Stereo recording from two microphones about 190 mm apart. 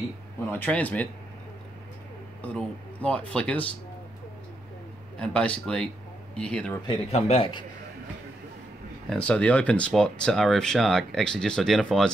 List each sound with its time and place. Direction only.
0.5 s speech: 10° left (ahead or behind)
2.4 s speech: 5° left (ahead or behind)
5.2 s speech: 5° left (ahead or behind)
6.9 s speech: 35° left (ahead or behind)
9.1 s speech: 5° left (ahead or behind)